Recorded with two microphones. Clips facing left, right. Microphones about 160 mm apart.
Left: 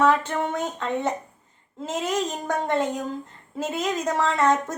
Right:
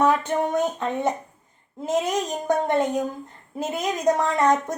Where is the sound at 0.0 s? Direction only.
15° right (ahead or behind).